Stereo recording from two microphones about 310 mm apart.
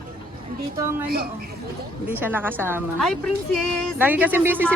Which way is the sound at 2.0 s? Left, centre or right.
Centre.